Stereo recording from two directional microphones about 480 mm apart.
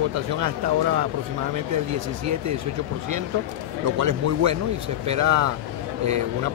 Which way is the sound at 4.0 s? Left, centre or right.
Right.